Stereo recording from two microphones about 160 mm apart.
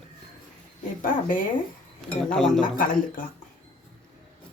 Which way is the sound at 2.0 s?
5° left (ahead or behind).